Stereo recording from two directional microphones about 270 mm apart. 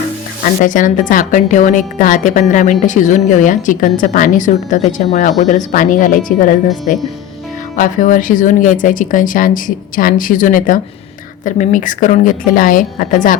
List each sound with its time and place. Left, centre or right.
0.6 s a woman's voice: left